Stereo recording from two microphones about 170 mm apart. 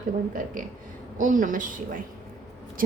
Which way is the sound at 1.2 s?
50° right (ahead or behind).